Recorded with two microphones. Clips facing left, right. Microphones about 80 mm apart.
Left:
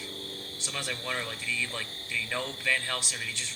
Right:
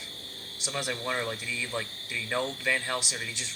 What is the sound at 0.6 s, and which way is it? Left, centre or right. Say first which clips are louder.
Speech: right 4 dB; centre.